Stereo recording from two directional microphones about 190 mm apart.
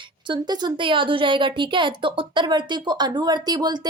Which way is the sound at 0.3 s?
20° right (ahead or behind).